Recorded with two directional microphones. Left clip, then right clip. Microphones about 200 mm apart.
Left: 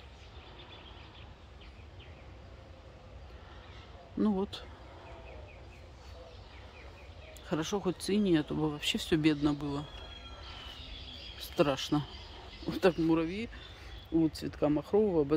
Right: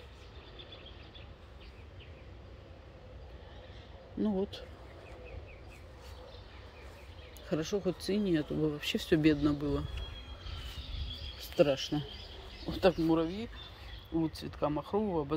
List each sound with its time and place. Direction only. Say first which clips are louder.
7.4 s speech: even; 10° left (ahead or behind)
11.3 s speech: right 2 dB; 10° left (ahead or behind)